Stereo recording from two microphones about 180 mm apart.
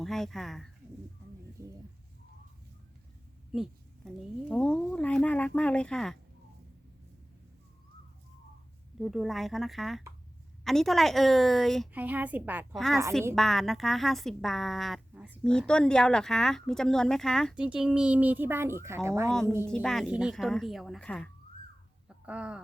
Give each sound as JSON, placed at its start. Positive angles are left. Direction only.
{"t": 0.0, "sound": "speech", "side_deg": 0}
{"t": 1.6, "sound": "a sound", "side_deg": -20}
{"t": 3.5, "sound": "speech", "side_deg": 0}
{"t": 9.0, "sound": "speech", "side_deg": 0}
{"t": 11.9, "sound": "a woman's voice", "side_deg": -10}
{"t": 12.7, "sound": "speech", "side_deg": 0}
{"t": 19.6, "sound": "speech", "side_deg": 5}
{"t": 22.3, "sound": "a woman's voice", "side_deg": -5}